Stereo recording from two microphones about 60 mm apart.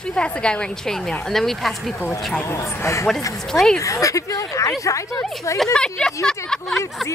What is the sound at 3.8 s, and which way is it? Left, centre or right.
Speech, left.